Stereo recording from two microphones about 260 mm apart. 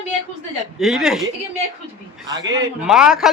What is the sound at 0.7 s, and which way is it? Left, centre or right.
Speech, centre.